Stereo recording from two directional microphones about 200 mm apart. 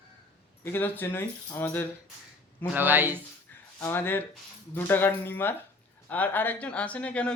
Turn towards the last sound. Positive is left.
turn(degrees=5)  # may be behind; listen again after turning